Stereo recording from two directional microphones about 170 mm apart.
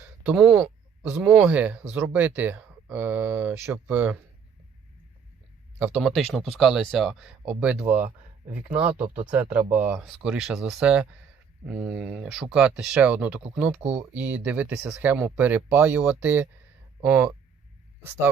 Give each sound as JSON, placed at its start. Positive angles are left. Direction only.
{"t": 0.2, "sound": "speech", "side_deg": -5}
{"t": 5.8, "sound": "speech", "side_deg": -5}
{"t": 8.0, "sound": "speech", "side_deg": -55}
{"t": 8.7, "sound": "speech", "side_deg": -10}
{"t": 9.0, "sound": "speech", "side_deg": -50}
{"t": 9.3, "sound": "speech", "side_deg": -10}